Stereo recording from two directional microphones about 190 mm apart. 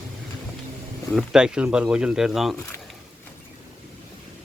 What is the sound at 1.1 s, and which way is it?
Speech, 5° right (ahead or behind).